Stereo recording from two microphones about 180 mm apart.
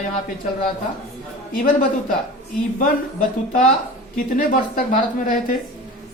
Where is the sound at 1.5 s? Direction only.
50° left (ahead or behind).